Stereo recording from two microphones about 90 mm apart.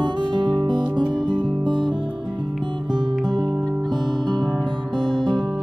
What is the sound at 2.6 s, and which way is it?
Music, 55° right (ahead or behind).